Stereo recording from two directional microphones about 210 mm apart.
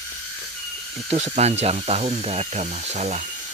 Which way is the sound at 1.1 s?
30° right (ahead or behind).